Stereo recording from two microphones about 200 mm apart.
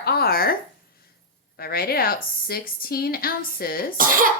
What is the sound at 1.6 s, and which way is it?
Speech, 50° left (ahead or behind).